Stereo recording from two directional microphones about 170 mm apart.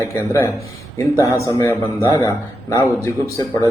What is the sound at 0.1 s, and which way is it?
Speech, 15° left (ahead or behind).